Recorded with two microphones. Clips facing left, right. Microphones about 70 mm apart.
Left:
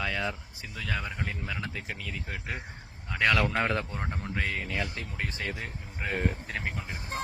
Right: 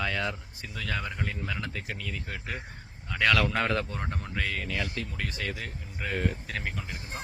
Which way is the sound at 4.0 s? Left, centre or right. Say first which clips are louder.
Even; centre.